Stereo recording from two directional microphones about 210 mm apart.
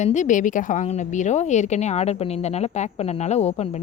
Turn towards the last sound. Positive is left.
turn(degrees=30)  # may be behind; listen again after turning